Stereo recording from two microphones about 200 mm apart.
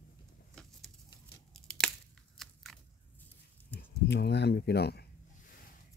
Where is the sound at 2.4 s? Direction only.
Centre (ahead or behind).